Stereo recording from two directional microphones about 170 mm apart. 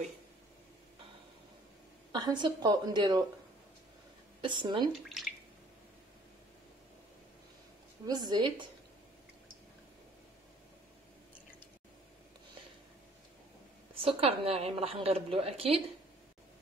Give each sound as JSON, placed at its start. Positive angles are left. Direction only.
{"t": 2.2, "sound": "speech", "side_deg": -25}
{"t": 4.4, "sound": "speech", "side_deg": -30}
{"t": 5.2, "sound": "drip", "side_deg": 0}
{"t": 8.1, "sound": "speech", "side_deg": -25}
{"t": 13.9, "sound": "a woman's voice", "side_deg": -35}